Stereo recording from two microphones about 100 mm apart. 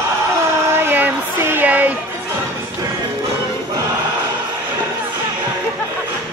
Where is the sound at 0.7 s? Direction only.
20° right (ahead or behind).